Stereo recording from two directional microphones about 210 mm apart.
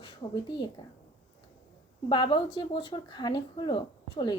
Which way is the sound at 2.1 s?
20° left (ahead or behind).